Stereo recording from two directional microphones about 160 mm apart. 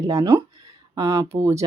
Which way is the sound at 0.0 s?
20° right (ahead or behind).